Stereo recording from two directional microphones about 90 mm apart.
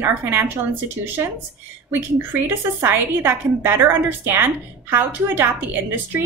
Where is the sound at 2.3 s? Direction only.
25° right (ahead or behind).